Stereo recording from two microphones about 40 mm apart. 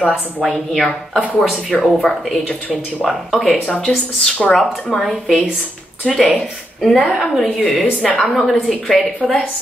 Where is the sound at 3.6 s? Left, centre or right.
Left.